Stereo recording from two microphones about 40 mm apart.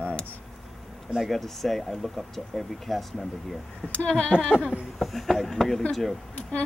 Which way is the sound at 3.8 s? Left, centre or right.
Left.